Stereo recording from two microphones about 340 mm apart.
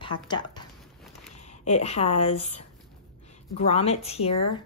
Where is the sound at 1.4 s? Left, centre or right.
Centre.